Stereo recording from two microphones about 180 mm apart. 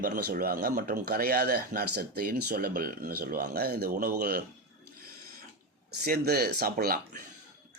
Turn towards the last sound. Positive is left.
turn(degrees=-55)  # may be behind; listen again after turning